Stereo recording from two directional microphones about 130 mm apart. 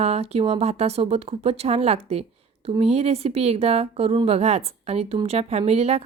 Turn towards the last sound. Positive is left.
turn(degrees=-55)  # may be behind; listen again after turning